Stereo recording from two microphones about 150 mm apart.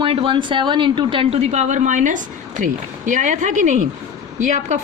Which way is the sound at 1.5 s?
50° right (ahead or behind).